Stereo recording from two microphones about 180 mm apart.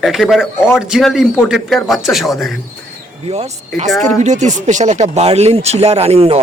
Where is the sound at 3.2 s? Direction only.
35° right (ahead or behind).